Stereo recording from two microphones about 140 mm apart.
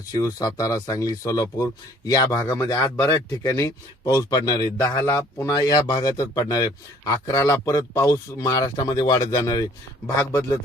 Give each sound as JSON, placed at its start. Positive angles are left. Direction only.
{"t": 0.1, "sound": "speech", "side_deg": 25}